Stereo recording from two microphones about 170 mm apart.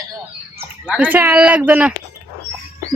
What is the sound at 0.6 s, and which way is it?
Speech, 10° right (ahead or behind).